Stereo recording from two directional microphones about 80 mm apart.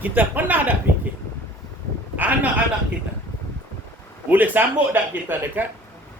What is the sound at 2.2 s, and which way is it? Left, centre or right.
Speech, centre.